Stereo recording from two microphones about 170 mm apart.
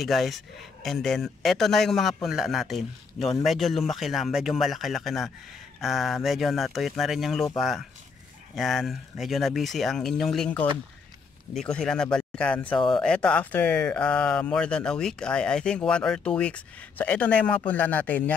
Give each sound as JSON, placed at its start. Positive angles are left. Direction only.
{"t": 0.0, "sound": "a man's voice", "side_deg": 0}
{"t": 12.7, "sound": "speech", "side_deg": 30}
{"t": 13.0, "sound": "speech", "side_deg": 5}